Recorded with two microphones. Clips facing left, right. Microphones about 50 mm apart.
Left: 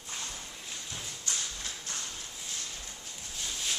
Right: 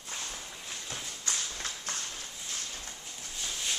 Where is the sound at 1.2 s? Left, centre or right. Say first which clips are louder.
Right 2 dB; right.